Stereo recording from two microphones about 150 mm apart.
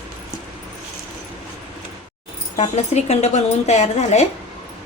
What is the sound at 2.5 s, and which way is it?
A woman's voice, 45° left (ahead or behind).